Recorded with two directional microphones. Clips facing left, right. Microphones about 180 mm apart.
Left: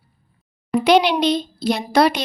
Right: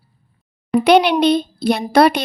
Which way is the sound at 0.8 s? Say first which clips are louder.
Right 3 dB; 60° right (ahead or behind).